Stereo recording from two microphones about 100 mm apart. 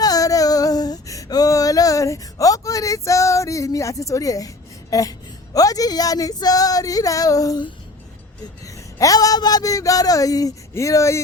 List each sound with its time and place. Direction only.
0.0 s female singing: 35° left (ahead or behind)
5.5 s a man's voice: 35° left (ahead or behind)
8.6 s a man's voice: 35° left (ahead or behind)